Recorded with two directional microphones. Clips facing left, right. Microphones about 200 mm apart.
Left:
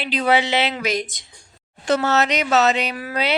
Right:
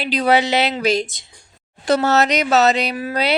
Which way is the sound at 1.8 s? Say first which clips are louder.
Right 3 dB; 40° right (ahead or behind).